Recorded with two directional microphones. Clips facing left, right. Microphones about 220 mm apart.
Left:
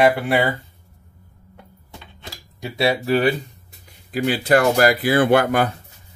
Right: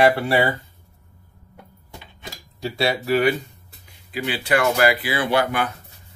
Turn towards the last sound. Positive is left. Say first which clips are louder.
# left 6 dB
turn(degrees=50)  # may be behind; listen again after turning